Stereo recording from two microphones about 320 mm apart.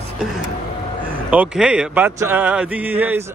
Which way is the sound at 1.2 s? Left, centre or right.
Centre.